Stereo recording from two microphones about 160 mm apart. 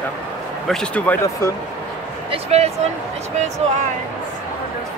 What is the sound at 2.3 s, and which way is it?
Speech, 40° right (ahead or behind).